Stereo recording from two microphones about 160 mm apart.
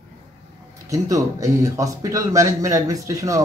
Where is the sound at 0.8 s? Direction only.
20° right (ahead or behind).